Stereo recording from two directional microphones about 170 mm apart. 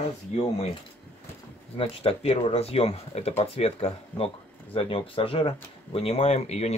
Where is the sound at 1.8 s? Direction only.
35° left (ahead or behind).